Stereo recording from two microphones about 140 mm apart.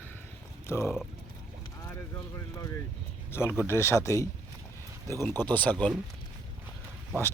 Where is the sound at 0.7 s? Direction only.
20° left (ahead or behind).